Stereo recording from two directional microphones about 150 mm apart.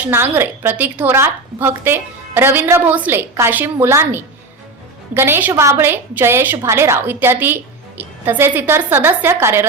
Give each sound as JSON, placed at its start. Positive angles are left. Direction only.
{"t": 0.1, "sound": "a woman's voice", "side_deg": -15}